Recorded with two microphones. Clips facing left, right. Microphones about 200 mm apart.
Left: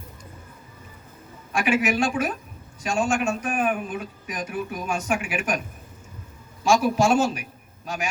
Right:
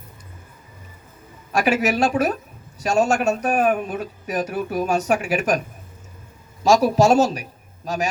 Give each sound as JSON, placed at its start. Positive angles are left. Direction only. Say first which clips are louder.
{"t": 1.5, "sound": "a man's voice", "louder": "right 3 dB", "side_deg": -40}
{"t": 6.7, "sound": "a man's voice", "louder": "right 4 dB", "side_deg": -40}